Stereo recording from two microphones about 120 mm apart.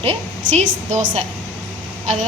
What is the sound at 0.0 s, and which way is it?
A woman's voice, 65° right (ahead or behind).